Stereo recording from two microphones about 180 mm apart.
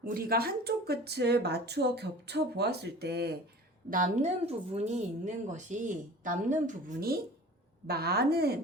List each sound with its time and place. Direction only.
0.0 s speech: 55° right (ahead or behind)
3.8 s speech: 45° right (ahead or behind)
7.9 s speech: 60° right (ahead or behind)